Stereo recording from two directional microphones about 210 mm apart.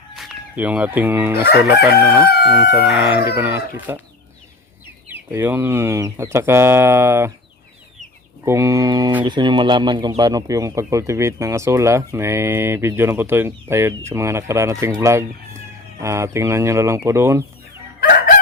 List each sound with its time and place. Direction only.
0.2 s speech: 5° right (ahead or behind)
2.6 s speech: 5° right (ahead or behind)
5.0 s speech: 10° right (ahead or behind)
8.4 s speech: 15° right (ahead or behind)
18.0 s crowing: 45° left (ahead or behind)